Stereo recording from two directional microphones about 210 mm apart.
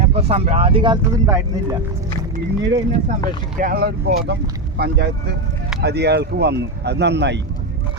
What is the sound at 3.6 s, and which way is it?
Speech, 45° right (ahead or behind).